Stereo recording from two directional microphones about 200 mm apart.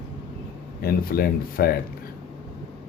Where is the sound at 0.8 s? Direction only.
50° left (ahead or behind).